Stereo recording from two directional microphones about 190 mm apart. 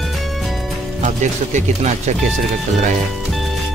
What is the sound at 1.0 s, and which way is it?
Speech, 40° right (ahead or behind).